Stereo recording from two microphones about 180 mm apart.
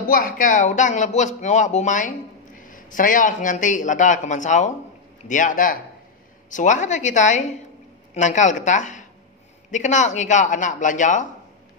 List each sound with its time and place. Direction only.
0.1 s a woman's voice: 50° left (ahead or behind)